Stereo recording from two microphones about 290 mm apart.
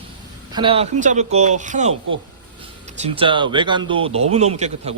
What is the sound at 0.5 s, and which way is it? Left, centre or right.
A man's voice, centre.